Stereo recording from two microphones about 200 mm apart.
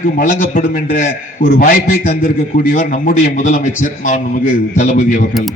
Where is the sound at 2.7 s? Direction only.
40° left (ahead or behind).